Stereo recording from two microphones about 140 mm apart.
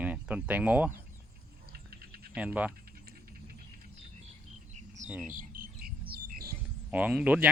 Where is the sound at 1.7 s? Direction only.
90° right.